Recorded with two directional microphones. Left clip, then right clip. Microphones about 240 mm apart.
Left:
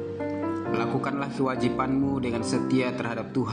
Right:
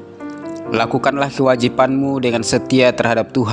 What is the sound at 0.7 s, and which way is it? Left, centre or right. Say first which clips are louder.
Speech: right 15 dB; right.